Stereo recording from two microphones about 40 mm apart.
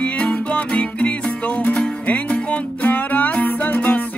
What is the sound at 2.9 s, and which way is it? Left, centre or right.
Music, left.